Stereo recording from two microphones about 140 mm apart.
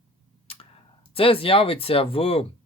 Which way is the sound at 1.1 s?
40° left (ahead or behind).